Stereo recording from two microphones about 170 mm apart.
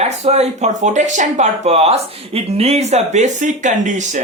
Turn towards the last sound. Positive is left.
turn(degrees=-45)  # may be behind; listen again after turning